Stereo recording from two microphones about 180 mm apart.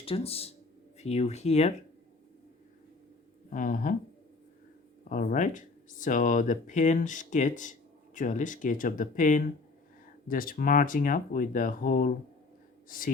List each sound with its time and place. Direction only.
0.0 s speech: 35° left (ahead or behind)
3.5 s speech: 50° left (ahead or behind)
5.0 s speech: 50° left (ahead or behind)